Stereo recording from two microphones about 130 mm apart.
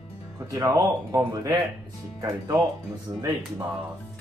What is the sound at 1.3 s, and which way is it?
Speech, 35° right (ahead or behind).